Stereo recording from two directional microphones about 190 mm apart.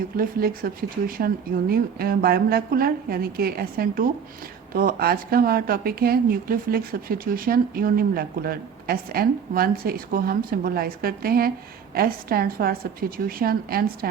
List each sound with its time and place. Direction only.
0.2 s a woman's voice: 50° right (ahead or behind)